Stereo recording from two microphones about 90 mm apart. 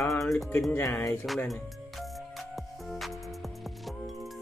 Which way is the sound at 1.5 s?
Centre (ahead or behind).